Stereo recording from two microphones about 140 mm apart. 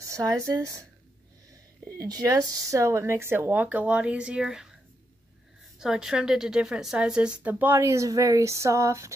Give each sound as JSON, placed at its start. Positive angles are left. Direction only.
{"t": 0.0, "sound": "speech", "side_deg": -25}
{"t": 1.9, "sound": "a woman's voice", "side_deg": -25}
{"t": 5.8, "sound": "a woman's voice", "side_deg": -5}